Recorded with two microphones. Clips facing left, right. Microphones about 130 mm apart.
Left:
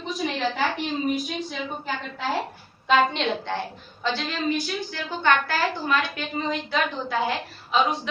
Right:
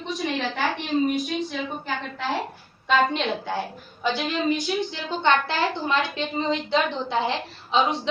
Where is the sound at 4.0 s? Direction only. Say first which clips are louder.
Right 2 dB; 15° right (ahead or behind).